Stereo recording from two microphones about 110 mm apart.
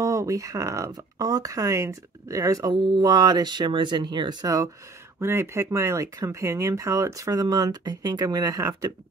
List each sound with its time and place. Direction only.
0.0 s speech: 30° right (ahead or behind)
5.2 s speech: 25° right (ahead or behind)